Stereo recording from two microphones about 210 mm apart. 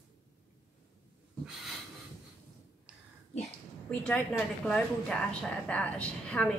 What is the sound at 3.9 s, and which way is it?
A woman's voice, 10° left (ahead or behind).